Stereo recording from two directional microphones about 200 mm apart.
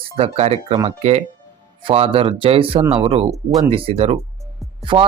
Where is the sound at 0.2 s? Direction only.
30° right (ahead or behind).